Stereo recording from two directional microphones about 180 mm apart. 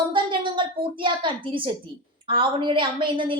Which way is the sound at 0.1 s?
25° right (ahead or behind).